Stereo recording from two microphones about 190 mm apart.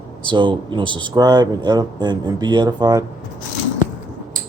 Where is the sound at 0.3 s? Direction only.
25° right (ahead or behind).